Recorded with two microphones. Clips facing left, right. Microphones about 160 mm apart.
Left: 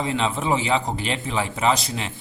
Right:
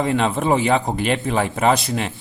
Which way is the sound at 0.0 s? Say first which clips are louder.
Right 5 dB; 55° right (ahead or behind).